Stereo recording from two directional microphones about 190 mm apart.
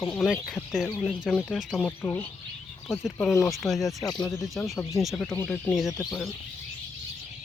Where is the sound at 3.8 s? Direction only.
20° left (ahead or behind).